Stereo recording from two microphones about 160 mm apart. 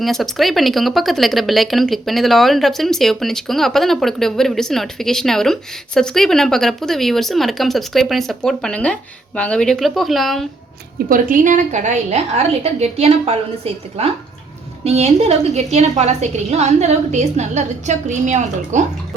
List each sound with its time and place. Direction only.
0.0 s speech: centre (ahead or behind)
11.1 s a woman's voice: 55° right (ahead or behind)